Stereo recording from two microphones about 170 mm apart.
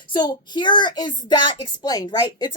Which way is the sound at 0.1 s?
25° left (ahead or behind).